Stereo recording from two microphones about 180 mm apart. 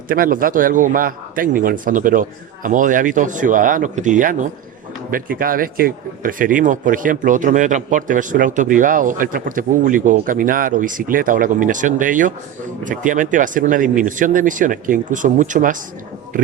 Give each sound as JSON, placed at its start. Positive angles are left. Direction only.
{"t": 0.1, "sound": "speech", "side_deg": -50}